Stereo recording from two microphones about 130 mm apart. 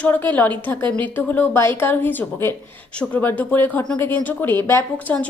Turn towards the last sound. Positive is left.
turn(degrees=20)  # may be behind; listen again after turning